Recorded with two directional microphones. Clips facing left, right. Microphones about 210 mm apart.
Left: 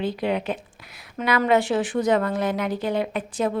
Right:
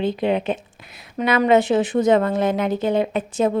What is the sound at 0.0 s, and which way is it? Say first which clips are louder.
A woman's voice: right 4 dB; 25° right (ahead or behind).